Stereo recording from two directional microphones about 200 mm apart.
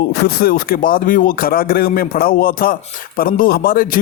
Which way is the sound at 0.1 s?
50° left (ahead or behind).